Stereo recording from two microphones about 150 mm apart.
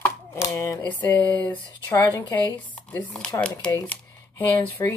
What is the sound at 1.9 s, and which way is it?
Speech, 25° left (ahead or behind).